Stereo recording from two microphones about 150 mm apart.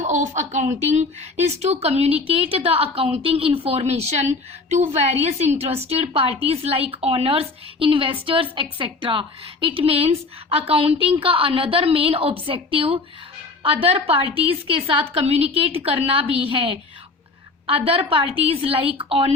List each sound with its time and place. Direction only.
0.0 s a woman's voice: 55° right (ahead or behind); by 19.3 s 40° right (ahead or behind)